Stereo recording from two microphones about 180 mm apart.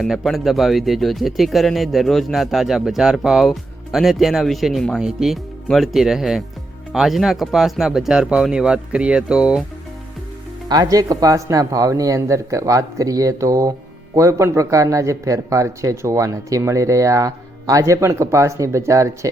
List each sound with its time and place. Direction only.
0.0 s speech: centre (ahead or behind)
10.7 s speech: 20° right (ahead or behind)